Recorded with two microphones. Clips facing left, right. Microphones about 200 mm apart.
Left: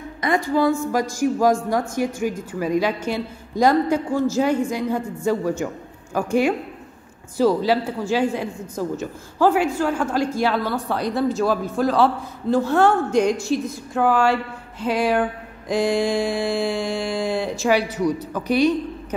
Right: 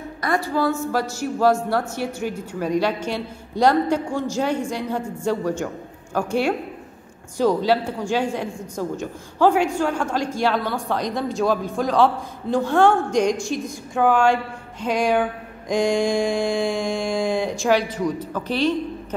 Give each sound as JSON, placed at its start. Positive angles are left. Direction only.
{"t": 0.2, "sound": "a woman's voice", "side_deg": 20}